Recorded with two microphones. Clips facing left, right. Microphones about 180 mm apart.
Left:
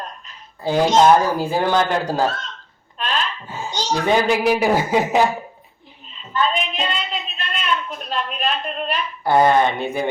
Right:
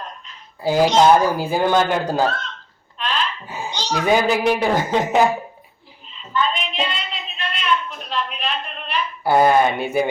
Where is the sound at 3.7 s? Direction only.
45° left (ahead or behind).